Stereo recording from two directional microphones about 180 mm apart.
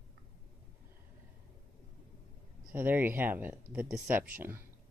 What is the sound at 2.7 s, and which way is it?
Speech, 10° right (ahead or behind).